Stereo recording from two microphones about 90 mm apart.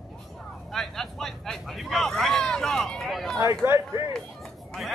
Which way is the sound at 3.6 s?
35° right (ahead or behind).